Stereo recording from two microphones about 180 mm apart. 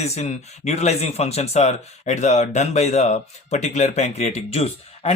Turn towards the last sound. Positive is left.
turn(degrees=35)  # may be behind; listen again after turning